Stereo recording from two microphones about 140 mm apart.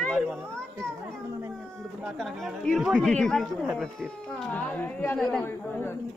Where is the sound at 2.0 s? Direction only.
Centre (ahead or behind).